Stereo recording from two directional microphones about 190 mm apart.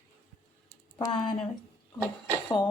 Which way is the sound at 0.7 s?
15° left (ahead or behind).